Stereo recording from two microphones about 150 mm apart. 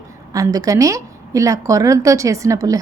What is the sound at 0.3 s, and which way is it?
A woman's voice, 25° right (ahead or behind).